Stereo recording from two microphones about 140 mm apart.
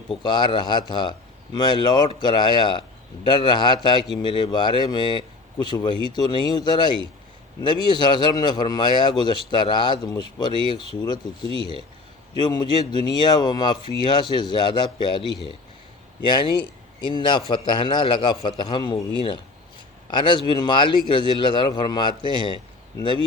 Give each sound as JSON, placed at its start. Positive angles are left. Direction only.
{"t": 0.1, "sound": "speech", "side_deg": 30}
{"t": 12.4, "sound": "speech", "side_deg": 30}